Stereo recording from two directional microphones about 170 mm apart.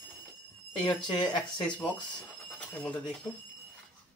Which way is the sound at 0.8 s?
25° left (ahead or behind).